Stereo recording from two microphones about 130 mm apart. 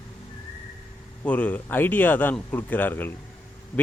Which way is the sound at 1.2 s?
10° left (ahead or behind).